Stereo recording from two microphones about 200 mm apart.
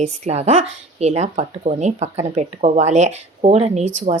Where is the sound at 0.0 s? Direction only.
35° right (ahead or behind).